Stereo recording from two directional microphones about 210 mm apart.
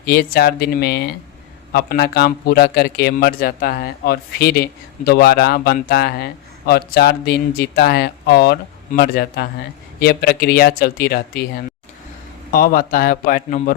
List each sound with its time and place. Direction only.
0.0 s a man's voice: 45° left (ahead or behind)